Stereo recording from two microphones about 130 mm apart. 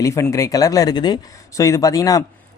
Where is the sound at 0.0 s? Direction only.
25° left (ahead or behind).